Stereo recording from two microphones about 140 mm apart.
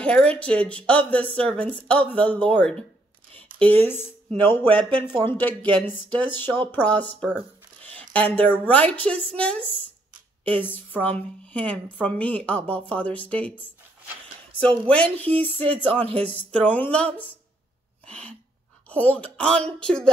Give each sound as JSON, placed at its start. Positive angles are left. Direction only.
{"t": 0.0, "sound": "a woman's voice", "side_deg": 10}
{"t": 10.7, "sound": "a woman's voice", "side_deg": 10}
{"t": 15.5, "sound": "a sound", "side_deg": -45}
{"t": 16.3, "sound": "a woman's voice", "side_deg": 10}
{"t": 18.0, "sound": "sneeze", "side_deg": 10}
{"t": 18.9, "sound": "a woman's voice", "side_deg": 10}